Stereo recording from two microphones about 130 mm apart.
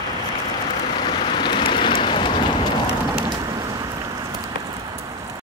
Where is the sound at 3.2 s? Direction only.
30° right (ahead or behind).